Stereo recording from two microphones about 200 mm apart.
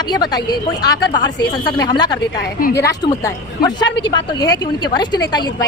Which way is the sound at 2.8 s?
15° left (ahead or behind).